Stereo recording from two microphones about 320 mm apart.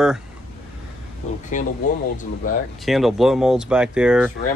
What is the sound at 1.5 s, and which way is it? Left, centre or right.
Speech, left.